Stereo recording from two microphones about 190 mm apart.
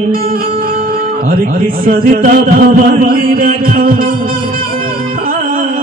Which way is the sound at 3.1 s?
50° right (ahead or behind).